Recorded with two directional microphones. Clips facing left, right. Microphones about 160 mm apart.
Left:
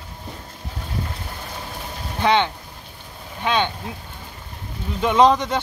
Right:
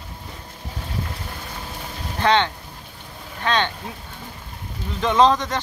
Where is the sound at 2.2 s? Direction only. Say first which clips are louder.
Even; 10° left (ahead or behind).